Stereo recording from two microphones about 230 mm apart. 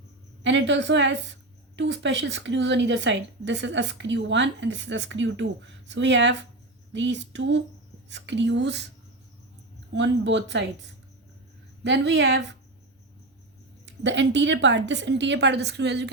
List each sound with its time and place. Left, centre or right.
0.4 s a woman's voice: right
9.9 s a woman's voice: right
13.8 s a woman's voice: right